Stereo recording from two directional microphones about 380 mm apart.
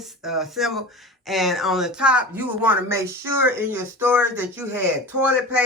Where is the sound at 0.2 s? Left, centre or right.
Centre.